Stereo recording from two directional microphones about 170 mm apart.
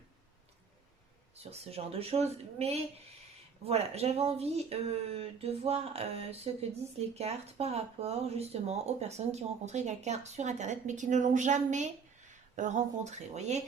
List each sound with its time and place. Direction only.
1.4 s speech: 35° right (ahead or behind)